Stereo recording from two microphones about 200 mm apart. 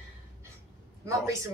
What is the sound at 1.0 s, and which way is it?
Speech, 15° right (ahead or behind).